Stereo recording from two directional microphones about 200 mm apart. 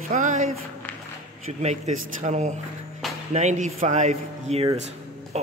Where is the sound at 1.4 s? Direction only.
35° right (ahead or behind).